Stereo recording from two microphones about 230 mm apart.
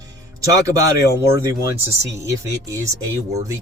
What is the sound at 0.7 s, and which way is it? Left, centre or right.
Speech, centre.